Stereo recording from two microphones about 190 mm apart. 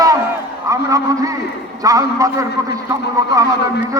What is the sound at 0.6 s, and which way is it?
A man's voice, 15° right (ahead or behind).